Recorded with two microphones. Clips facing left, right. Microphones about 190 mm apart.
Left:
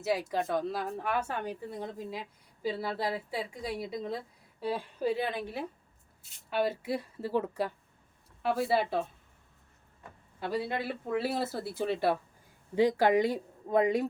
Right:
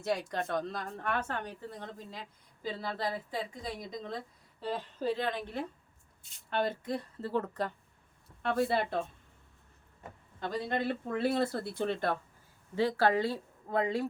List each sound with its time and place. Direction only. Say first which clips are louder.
0.0 s a woman's voice: left 3 dB; 5° left (ahead or behind)
10.4 s a woman's voice: even; 10° left (ahead or behind)